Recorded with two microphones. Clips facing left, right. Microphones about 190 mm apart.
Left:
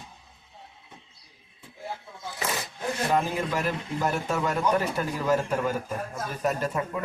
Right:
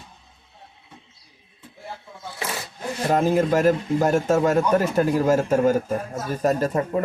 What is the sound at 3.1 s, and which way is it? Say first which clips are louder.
Speech: right 9 dB; 45° right (ahead or behind).